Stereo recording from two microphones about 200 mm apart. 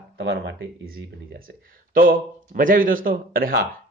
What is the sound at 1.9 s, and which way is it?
A man's voice, 45° right (ahead or behind).